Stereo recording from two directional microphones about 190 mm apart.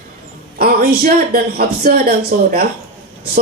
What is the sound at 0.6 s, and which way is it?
Speech, 50° right (ahead or behind).